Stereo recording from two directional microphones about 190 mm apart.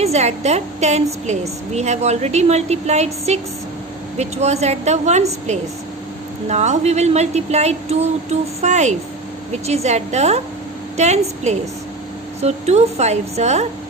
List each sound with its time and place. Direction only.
0.0 s a woman's voice: 35° right (ahead or behind)